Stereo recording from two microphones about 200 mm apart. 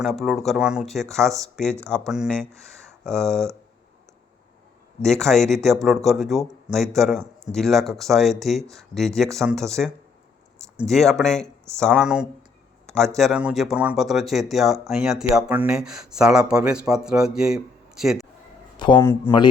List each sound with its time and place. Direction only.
0.0 s speech: centre (ahead or behind)
5.0 s speech: 5° left (ahead or behind)
18.9 s speech: 10° left (ahead or behind)